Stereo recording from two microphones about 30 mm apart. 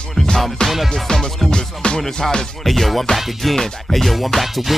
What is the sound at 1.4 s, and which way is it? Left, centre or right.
Music, left.